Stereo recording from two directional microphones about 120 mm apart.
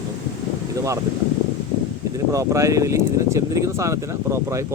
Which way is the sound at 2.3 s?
25° right (ahead or behind).